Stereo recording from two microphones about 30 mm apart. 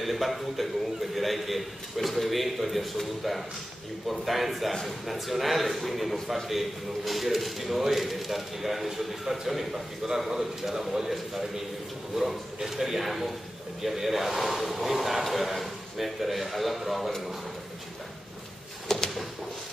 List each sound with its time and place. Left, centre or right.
0.0 s speech: centre
4.1 s a man's voice: centre
18.9 s a sound: centre